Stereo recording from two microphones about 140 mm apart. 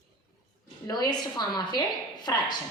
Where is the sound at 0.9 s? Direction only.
30° left (ahead or behind).